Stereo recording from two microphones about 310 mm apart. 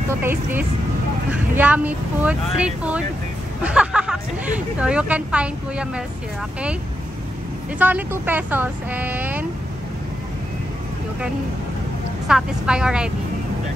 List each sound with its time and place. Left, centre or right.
0.1 s speech: centre
7.8 s speech: centre
12.3 s speech: centre